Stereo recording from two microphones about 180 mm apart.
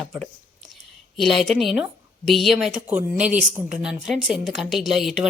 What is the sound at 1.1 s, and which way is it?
Speech, centre (ahead or behind).